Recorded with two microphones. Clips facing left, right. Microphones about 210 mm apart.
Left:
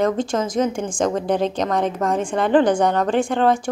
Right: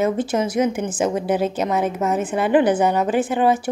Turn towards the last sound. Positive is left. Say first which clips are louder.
# even
turn(degrees=-5)  # may be behind; listen again after turning